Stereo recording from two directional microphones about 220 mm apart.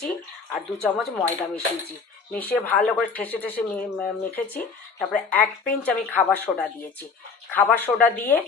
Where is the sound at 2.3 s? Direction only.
5° left (ahead or behind).